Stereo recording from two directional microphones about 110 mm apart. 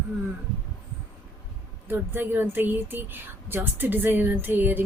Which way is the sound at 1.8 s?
20° right (ahead or behind).